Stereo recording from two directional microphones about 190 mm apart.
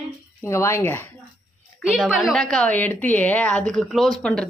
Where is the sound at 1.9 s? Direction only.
5° right (ahead or behind).